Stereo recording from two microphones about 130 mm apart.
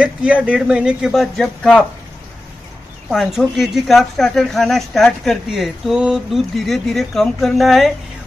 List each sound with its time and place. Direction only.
0.0 s speech: 10° right (ahead or behind); by 1.9 s 5° left (ahead or behind)
3.1 s speech: centre (ahead or behind)